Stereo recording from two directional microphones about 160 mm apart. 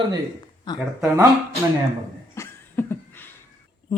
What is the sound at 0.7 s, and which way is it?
Speech, 25° left (ahead or behind).